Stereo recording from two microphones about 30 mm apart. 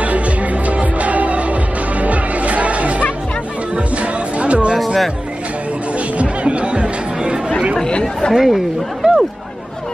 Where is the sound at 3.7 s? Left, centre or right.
Right.